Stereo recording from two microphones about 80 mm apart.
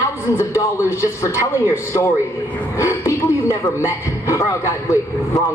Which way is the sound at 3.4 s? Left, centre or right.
Left.